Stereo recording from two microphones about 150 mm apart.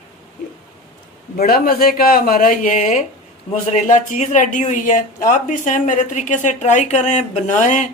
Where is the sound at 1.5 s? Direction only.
75° left (ahead or behind); by 7.9 s 50° left (ahead or behind).